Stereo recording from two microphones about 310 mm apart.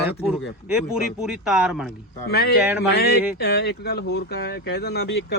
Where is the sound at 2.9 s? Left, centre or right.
Left.